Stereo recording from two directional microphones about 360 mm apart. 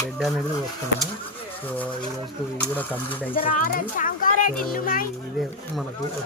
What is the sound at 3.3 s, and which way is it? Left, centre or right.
Speech, left.